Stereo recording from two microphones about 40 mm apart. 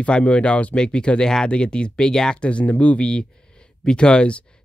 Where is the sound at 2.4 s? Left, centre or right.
Left.